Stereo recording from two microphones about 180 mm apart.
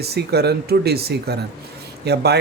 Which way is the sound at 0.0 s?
65° right (ahead or behind).